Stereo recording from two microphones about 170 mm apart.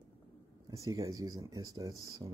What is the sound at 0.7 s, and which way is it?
Speech, 20° right (ahead or behind).